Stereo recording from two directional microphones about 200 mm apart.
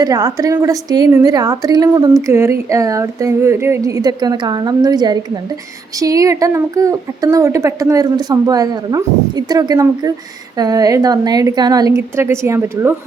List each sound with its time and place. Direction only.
0.0 s a woman's voice: 15° right (ahead or behind)